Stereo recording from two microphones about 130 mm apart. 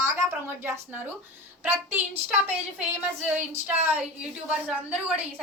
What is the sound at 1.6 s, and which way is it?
A woman's voice, 15° right (ahead or behind).